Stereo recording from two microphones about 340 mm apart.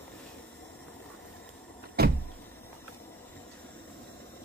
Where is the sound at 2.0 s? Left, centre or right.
Right.